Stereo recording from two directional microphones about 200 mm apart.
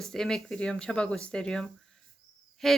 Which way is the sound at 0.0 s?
Centre (ahead or behind).